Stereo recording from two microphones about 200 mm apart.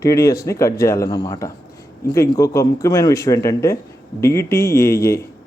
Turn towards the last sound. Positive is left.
turn(degrees=15)  # may be behind; listen again after turning